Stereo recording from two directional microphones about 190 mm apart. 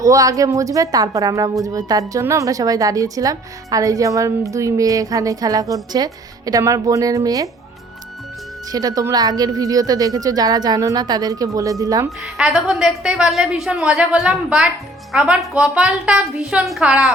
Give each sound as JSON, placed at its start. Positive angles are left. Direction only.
{"t": 0.0, "sound": "a woman's voice", "side_deg": -15}
{"t": 8.7, "sound": "speech", "side_deg": -20}
{"t": 12.2, "sound": "a woman's voice", "side_deg": -5}